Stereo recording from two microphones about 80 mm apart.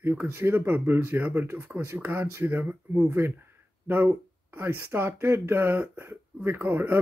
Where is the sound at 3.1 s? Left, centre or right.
Right.